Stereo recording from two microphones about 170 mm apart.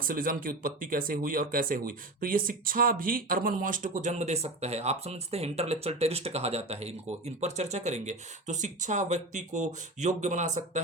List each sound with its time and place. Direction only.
0.1 s speech: 55° right (ahead or behind)